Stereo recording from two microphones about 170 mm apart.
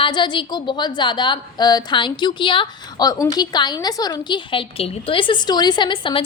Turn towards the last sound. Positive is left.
turn(degrees=30)  # may be behind; listen again after turning